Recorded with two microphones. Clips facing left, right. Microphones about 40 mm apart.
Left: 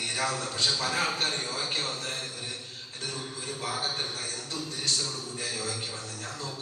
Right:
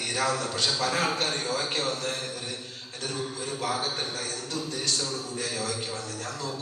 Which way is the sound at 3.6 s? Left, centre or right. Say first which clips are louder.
Right 2 dB; right.